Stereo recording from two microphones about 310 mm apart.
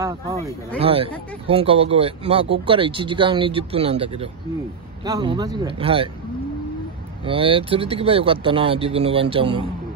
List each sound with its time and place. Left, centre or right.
0.0 s speech: centre
7.2 s speech: centre